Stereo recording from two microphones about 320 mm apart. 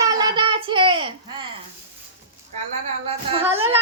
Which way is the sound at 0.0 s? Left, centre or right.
Centre.